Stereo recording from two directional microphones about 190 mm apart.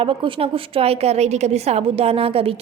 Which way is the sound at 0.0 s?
30° right (ahead or behind).